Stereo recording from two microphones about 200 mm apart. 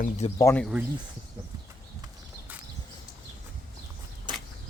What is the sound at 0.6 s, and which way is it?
Speech, 5° right (ahead or behind).